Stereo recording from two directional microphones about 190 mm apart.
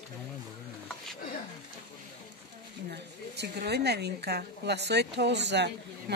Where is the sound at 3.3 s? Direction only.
60° right (ahead or behind).